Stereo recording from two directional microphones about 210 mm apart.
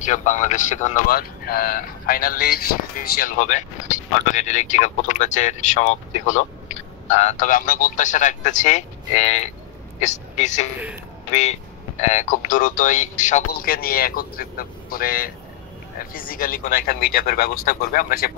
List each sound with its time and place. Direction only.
0.0 s a man's voice: 35° left (ahead or behind)